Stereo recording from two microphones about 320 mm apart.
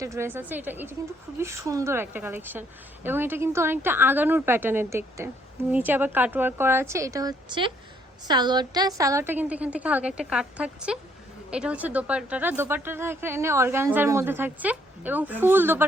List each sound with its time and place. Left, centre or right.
0.0 s a woman's voice: centre